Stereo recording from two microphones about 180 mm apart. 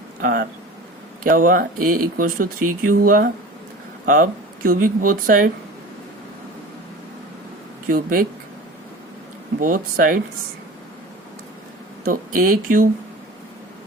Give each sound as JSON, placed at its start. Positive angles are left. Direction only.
{"t": 0.2, "sound": "speech", "side_deg": -50}
{"t": 7.9, "sound": "speech", "side_deg": -50}
{"t": 9.6, "sound": "speech", "side_deg": -50}
{"t": 12.0, "sound": "speech", "side_deg": -50}